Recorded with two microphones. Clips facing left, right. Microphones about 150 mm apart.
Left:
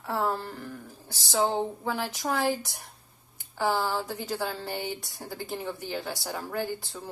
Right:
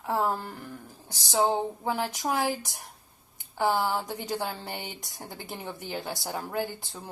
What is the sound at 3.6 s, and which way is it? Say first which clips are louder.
A woman's voice: right 1 dB; 15° right (ahead or behind).